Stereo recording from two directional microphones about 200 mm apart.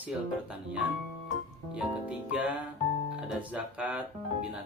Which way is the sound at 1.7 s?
5° right (ahead or behind).